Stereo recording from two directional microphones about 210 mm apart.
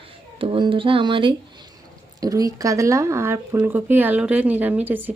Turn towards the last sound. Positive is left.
turn(degrees=-10)  # may be behind; listen again after turning